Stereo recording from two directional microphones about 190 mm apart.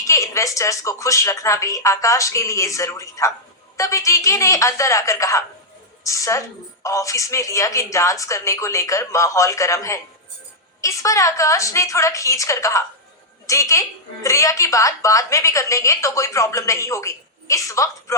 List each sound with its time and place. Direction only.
0.0 s a woman's voice: 15° left (ahead or behind)